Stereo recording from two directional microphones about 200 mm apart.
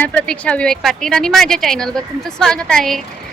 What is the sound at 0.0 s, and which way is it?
A woman's voice, 10° left (ahead or behind).